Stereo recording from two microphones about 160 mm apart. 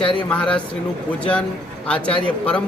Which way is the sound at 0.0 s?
30° left (ahead or behind).